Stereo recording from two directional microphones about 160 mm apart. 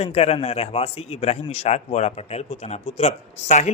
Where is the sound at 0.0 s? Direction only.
40° left (ahead or behind).